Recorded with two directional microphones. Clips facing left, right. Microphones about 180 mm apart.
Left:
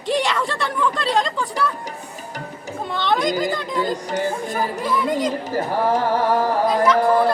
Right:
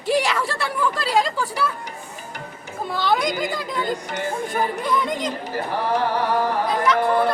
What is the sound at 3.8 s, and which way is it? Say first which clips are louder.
Music: left 3 dB; 40° left (ahead or behind).